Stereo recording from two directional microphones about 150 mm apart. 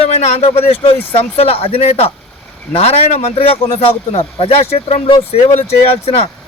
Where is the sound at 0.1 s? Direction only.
45° left (ahead or behind).